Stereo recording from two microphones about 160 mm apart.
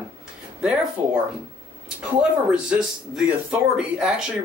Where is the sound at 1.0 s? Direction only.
15° right (ahead or behind).